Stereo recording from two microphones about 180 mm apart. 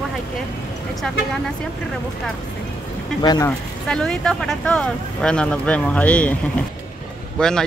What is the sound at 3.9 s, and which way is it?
Speech, 5° left (ahead or behind).